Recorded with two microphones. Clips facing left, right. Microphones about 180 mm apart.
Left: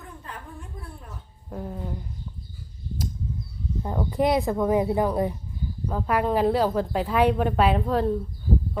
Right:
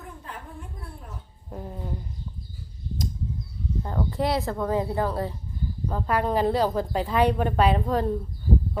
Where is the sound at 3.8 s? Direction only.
15° left (ahead or behind).